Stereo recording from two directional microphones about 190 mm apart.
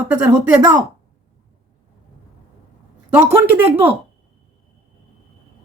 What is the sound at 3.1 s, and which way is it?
Speech, 10° right (ahead or behind).